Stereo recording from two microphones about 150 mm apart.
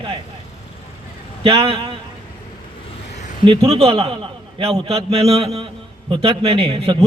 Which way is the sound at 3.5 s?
40° right (ahead or behind).